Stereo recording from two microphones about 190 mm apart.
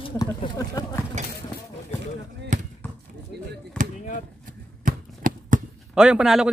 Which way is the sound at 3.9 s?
40° left (ahead or behind).